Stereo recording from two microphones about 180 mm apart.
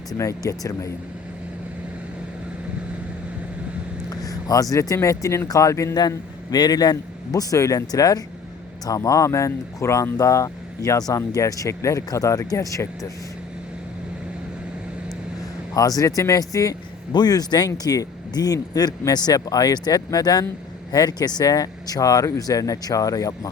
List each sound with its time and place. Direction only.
0.1 s speech: 20° left (ahead or behind)
4.1 s speech: 20° left (ahead or behind)
15.7 s speech: 20° left (ahead or behind)